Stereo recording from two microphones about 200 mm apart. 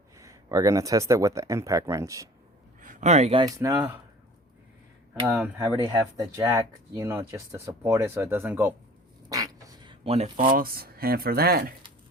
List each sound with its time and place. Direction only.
0.2 s speech: 15° right (ahead or behind)
2.8 s speech: 40° right (ahead or behind)
3.4 s speech: 15° right (ahead or behind)
5.2 s speech: 15° right (ahead or behind); by 11.7 s 50° right (ahead or behind)